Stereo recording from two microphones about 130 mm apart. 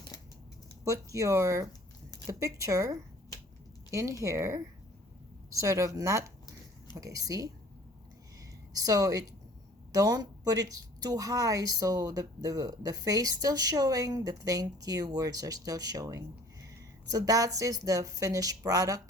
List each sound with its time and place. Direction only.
0.9 s a woman's voice: 25° right (ahead or behind)
8.7 s a woman's voice: 30° right (ahead or behind)